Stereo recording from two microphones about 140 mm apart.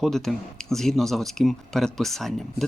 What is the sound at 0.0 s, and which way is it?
Speech, centre (ahead or behind).